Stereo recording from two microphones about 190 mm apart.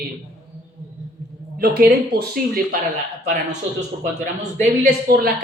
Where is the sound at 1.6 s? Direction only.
55° right (ahead or behind).